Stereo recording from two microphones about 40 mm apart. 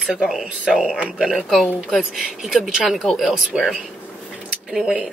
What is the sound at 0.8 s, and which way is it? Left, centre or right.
Speech, right.